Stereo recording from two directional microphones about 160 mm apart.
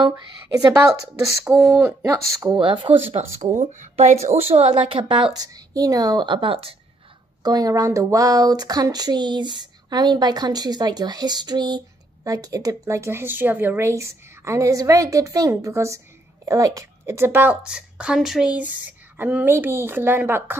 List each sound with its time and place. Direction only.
0.0 s a woman's voice: 25° right (ahead or behind)